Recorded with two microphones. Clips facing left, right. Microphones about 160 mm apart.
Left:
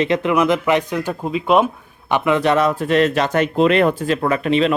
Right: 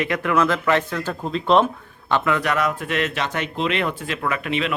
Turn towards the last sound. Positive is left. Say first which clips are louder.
# left 7 dB
turn(degrees=35)  # may be behind; listen again after turning